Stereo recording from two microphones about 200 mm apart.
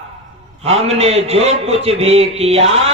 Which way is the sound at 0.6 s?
30° right (ahead or behind).